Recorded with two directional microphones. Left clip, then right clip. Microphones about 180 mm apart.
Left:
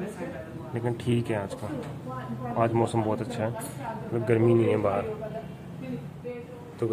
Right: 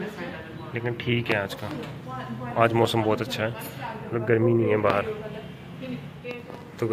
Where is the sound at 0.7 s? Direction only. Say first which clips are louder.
Right 2 dB; 20° left (ahead or behind).